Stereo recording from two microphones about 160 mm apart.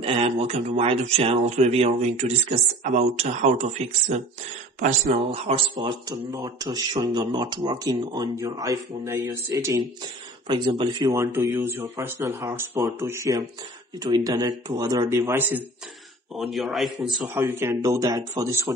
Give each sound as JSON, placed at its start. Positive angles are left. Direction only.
{"t": 0.0, "sound": "speech", "side_deg": -35}
{"t": 5.8, "sound": "speech", "side_deg": -25}
{"t": 16.3, "sound": "a man's voice", "side_deg": 0}
{"t": 17.3, "sound": "speech", "side_deg": -15}